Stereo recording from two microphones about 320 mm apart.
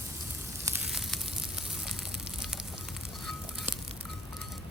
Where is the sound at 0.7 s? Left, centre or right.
Centre.